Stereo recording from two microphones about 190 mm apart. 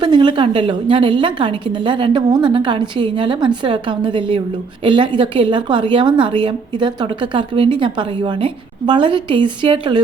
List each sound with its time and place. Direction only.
0.0 s a woman's voice: 25° right (ahead or behind)